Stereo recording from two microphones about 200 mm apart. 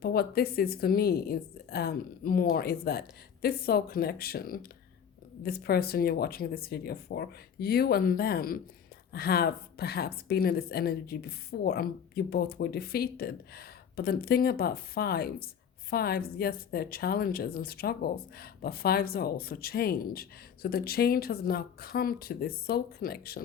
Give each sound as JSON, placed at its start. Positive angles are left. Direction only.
{"t": 0.0, "sound": "a woman's voice", "side_deg": 50}